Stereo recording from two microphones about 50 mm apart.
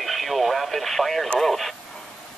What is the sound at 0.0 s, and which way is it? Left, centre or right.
Speech, centre.